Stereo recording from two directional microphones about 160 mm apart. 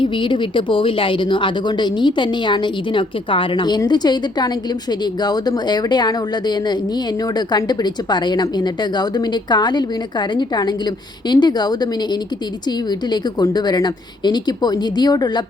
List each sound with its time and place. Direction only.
0.0 s a woman's voice: 30° left (ahead or behind)